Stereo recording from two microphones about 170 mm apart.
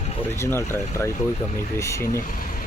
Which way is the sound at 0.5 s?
15° left (ahead or behind).